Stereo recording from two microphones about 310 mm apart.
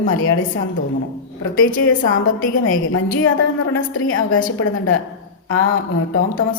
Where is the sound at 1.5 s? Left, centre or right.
Left.